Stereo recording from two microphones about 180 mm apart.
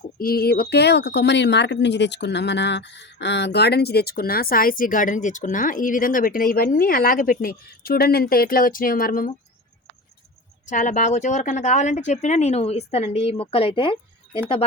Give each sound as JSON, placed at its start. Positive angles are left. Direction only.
{"t": 0.2, "sound": "speech", "side_deg": 55}
{"t": 10.7, "sound": "speech", "side_deg": 45}